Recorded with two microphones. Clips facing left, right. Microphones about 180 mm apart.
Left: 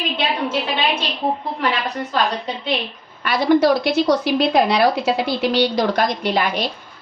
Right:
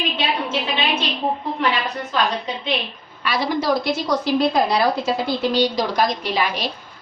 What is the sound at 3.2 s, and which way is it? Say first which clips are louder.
Speech: left 7 dB; 60° left (ahead or behind).